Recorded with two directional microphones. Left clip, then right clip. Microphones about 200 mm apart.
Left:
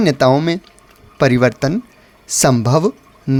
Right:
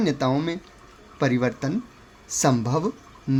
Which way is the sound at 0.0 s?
45° left (ahead or behind).